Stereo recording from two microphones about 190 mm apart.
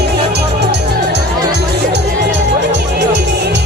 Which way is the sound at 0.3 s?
60° right (ahead or behind).